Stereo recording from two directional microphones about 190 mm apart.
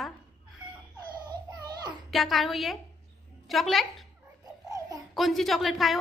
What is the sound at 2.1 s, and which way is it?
Speech, centre (ahead or behind).